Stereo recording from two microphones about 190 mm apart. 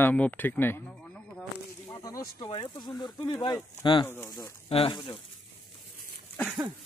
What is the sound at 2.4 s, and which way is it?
Speech, 25° left (ahead or behind).